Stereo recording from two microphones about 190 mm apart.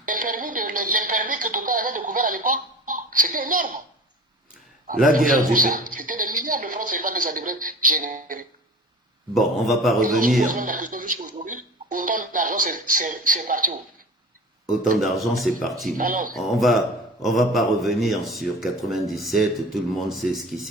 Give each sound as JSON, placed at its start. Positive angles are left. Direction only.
{"t": 0.0, "sound": "speech", "side_deg": -45}
{"t": 5.1, "sound": "a sound", "side_deg": -45}
{"t": 9.3, "sound": "a man's voice", "side_deg": 0}
{"t": 10.1, "sound": "speech", "side_deg": -45}
{"t": 14.9, "sound": "a man's voice", "side_deg": 0}
{"t": 16.0, "sound": "speech", "side_deg": -45}
{"t": 16.3, "sound": "a man's voice", "side_deg": 0}